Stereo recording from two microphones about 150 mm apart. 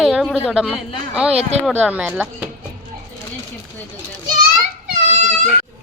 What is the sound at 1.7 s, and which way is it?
Speech, 10° right (ahead or behind).